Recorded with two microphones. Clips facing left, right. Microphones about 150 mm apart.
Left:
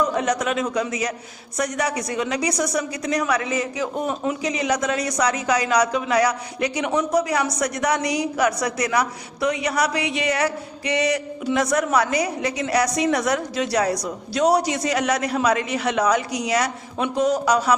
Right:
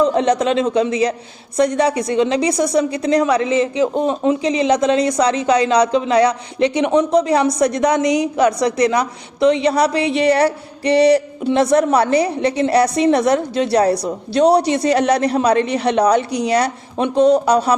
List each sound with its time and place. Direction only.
0.0 s a woman's voice: 25° right (ahead or behind)